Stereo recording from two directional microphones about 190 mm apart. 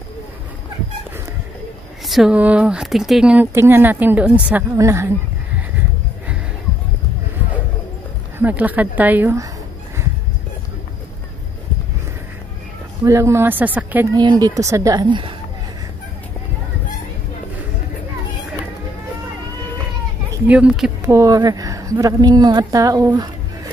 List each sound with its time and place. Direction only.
2.0 s speech: centre (ahead or behind)
8.4 s speech: 10° right (ahead or behind)
13.0 s speech: 15° right (ahead or behind)
14.1 s a woman's voice: 20° right (ahead or behind)
20.4 s speech: 5° right (ahead or behind)
21.0 s a woman's voice: 15° right (ahead or behind)